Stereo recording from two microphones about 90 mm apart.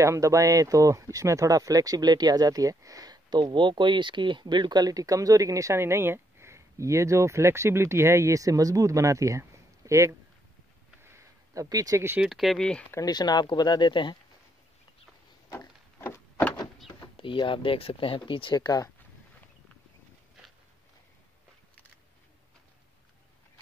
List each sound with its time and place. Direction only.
0.0 s speech: 35° right (ahead or behind)
11.0 s a sound: 30° right (ahead or behind)
12.2 s speech: centre (ahead or behind)
13.0 s speech: 50° left (ahead or behind)
16.0 s door: 25° left (ahead or behind)
16.5 s speech: 70° left (ahead or behind); by 18.9 s 50° left (ahead or behind)